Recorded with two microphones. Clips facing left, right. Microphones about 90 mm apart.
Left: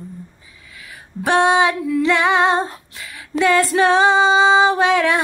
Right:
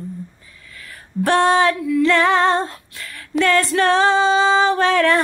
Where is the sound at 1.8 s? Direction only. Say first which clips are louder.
Right 1 dB; 25° left (ahead or behind).